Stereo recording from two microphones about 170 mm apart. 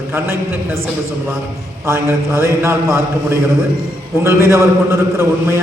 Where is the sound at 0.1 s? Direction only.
15° right (ahead or behind).